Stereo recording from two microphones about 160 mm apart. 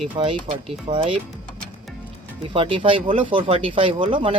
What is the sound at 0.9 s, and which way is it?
Speech, 45° right (ahead or behind).